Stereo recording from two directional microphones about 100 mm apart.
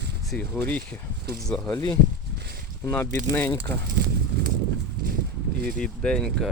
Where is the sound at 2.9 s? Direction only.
20° left (ahead or behind).